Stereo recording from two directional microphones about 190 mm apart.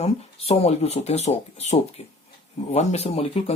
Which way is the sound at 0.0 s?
35° left (ahead or behind).